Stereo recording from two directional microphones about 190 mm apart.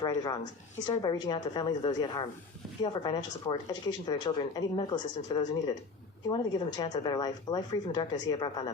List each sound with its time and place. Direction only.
0.0 s speech: 20° left (ahead or behind)